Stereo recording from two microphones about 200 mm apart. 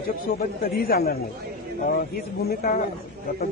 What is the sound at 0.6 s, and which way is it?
Speech, 50° left (ahead or behind).